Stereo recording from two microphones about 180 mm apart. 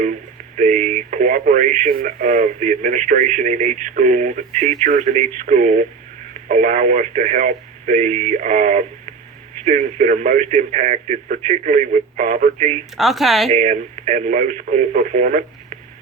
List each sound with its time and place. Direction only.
0.0 s speech: 45° right (ahead or behind)
13.0 s speech: centre (ahead or behind)
13.5 s speech: 40° right (ahead or behind)